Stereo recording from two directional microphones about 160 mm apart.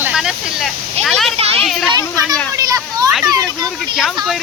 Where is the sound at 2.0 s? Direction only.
20° right (ahead or behind).